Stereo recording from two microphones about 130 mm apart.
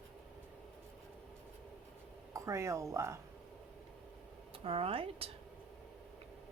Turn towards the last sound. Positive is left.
turn(degrees=-50)  # may be behind; listen again after turning